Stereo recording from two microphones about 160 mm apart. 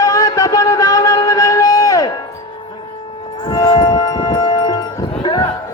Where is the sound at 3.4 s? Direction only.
25° left (ahead or behind).